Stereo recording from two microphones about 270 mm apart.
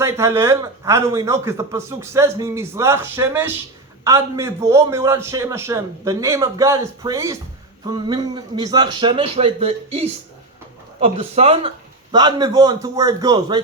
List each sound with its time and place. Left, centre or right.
0.0 s speech: centre